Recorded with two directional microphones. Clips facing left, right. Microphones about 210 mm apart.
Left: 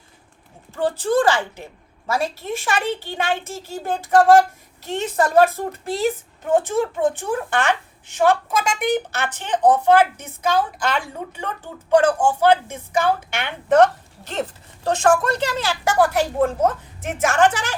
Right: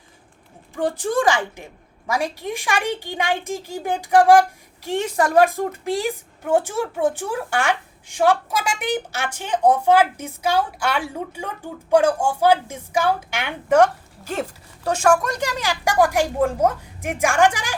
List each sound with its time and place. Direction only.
0.8 s a woman's voice: 15° right (ahead or behind)